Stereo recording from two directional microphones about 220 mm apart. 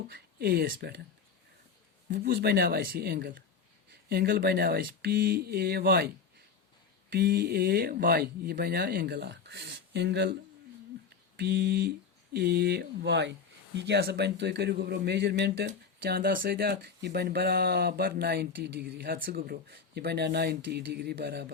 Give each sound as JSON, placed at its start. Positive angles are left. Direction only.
{"t": 0.1, "sound": "speech", "side_deg": -45}
{"t": 2.0, "sound": "speech", "side_deg": -40}
{"t": 7.1, "sound": "speech", "side_deg": -45}
{"t": 11.3, "sound": "speech", "side_deg": -50}